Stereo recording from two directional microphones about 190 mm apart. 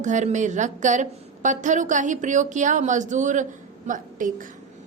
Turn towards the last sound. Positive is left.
turn(degrees=-45)  # may be behind; listen again after turning